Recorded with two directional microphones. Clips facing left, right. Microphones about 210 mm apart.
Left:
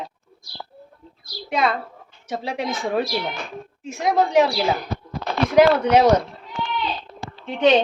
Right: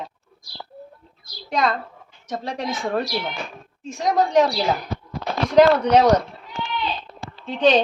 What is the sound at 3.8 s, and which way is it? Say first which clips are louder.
Speech: even; 5° left (ahead or behind).